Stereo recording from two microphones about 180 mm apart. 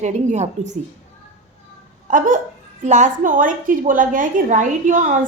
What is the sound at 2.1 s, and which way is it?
A woman's voice, 45° right (ahead or behind).